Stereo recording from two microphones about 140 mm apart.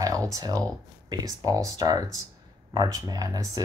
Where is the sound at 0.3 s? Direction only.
25° right (ahead or behind).